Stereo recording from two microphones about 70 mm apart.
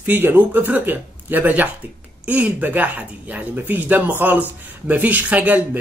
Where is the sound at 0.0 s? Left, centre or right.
Right.